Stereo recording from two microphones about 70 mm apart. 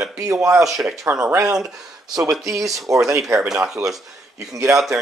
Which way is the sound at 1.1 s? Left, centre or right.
Right.